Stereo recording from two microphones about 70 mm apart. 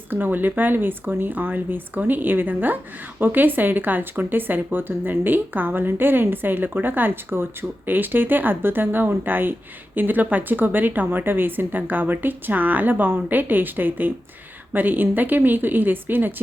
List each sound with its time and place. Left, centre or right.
0.1 s speech: right